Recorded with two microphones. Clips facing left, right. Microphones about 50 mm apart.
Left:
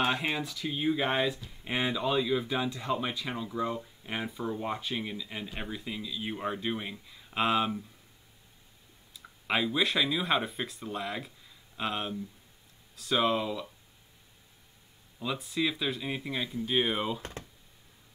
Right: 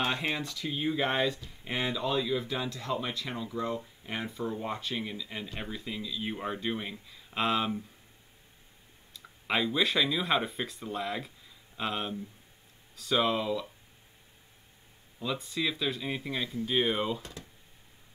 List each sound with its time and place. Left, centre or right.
0.0 s speech: centre
9.1 s speech: centre
15.1 s speech: centre
17.2 s speech: left